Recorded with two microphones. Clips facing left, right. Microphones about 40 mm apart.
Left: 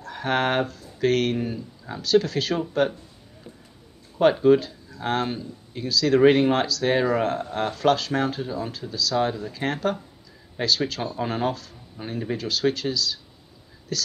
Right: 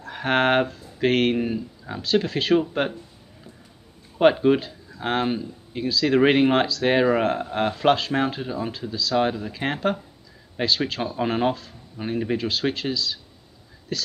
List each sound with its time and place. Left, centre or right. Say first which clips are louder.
0.0 s speech: right 3 dB; right
4.2 s speech: even; right